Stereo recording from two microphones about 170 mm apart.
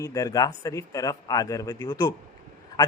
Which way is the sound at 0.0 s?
20° left (ahead or behind).